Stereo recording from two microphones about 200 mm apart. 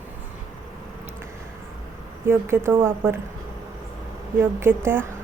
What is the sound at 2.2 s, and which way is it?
Speech, 10° right (ahead or behind).